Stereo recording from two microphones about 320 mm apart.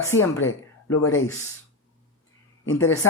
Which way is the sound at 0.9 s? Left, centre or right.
Left.